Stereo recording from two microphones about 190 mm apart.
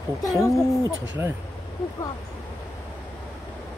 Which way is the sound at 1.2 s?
10° right (ahead or behind).